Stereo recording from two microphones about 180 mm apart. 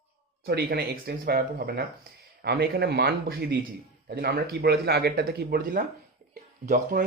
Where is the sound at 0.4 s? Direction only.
60° right (ahead or behind).